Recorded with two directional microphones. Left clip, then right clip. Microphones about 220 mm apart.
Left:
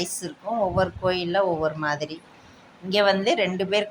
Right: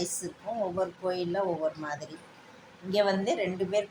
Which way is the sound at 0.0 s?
25° left (ahead or behind).